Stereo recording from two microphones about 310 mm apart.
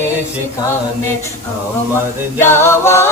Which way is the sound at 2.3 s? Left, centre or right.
Centre.